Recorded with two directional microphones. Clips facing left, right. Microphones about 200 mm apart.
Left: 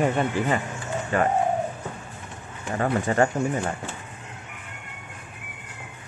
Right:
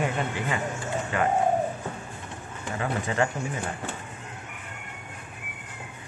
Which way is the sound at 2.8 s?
45° left (ahead or behind).